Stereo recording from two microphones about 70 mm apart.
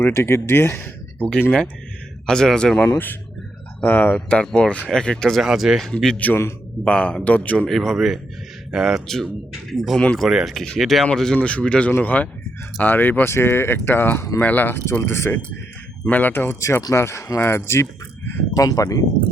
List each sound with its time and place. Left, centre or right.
0.1 s speech: left
1.2 s speech: centre
2.2 s speech: centre
3.8 s speech: left
5.4 s speech: centre
6.2 s speech: left
7.7 s a man's voice: centre
9.0 s speech: centre; by 15.4 s left
16.0 s speech: left
16.9 s speech: left
18.5 s speech: left